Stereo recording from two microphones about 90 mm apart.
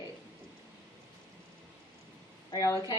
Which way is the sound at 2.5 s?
40° left (ahead or behind).